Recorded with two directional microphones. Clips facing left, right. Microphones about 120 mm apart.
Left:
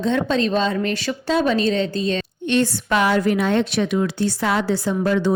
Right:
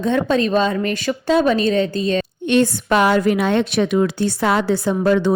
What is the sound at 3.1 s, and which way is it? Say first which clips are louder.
Speech: right 2 dB; 20° right (ahead or behind).